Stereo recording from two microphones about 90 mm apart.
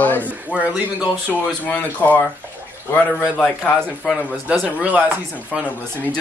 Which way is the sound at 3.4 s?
5° left (ahead or behind).